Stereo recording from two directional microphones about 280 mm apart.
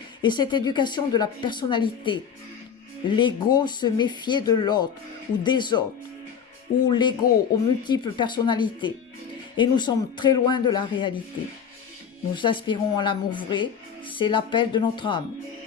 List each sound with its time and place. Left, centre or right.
0.2 s speech: centre
6.8 s speech: centre
12.3 s speech: centre